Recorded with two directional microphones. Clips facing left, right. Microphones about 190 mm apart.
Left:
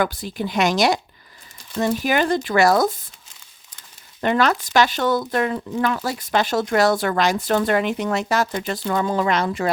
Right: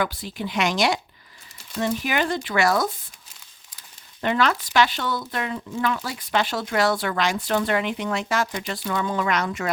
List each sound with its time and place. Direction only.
0.0 s speech: 45° left (ahead or behind)
4.2 s speech: 45° left (ahead or behind)